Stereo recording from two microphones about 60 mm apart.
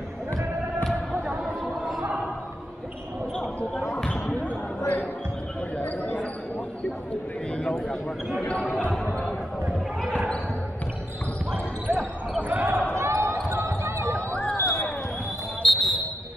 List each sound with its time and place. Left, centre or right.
1.1 s a sound: right
4.4 s basketball bounce: left
7.5 s a sound: centre
8.5 s speech: left
11.9 s basketball bounce: right
12.9 s basketball bounce: right
14.6 s basketball bounce: left
15.6 s basketball bounce: centre